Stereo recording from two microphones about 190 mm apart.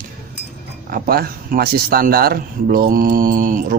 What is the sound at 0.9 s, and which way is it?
Speech, 50° right (ahead or behind).